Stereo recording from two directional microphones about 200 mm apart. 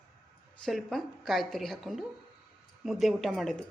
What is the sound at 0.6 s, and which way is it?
A woman's voice, centre (ahead or behind).